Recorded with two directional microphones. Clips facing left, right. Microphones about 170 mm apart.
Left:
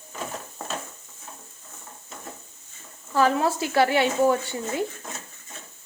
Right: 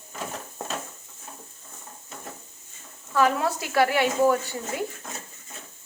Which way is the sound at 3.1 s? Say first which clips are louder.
Left 1 dB; 30° left (ahead or behind).